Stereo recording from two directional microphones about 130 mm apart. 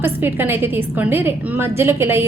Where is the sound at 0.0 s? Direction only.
15° right (ahead or behind).